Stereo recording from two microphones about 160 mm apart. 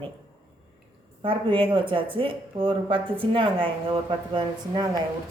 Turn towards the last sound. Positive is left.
turn(degrees=-25)  # may be behind; listen again after turning